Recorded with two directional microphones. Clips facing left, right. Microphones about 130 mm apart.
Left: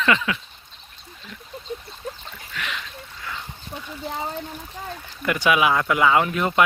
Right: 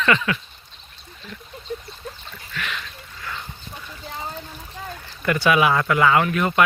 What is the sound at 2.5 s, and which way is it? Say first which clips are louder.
Splash: right 1 dB; 20° left (ahead or behind).